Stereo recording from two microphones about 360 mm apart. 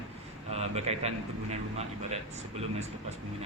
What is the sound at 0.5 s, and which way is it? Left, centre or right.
A man's voice, centre.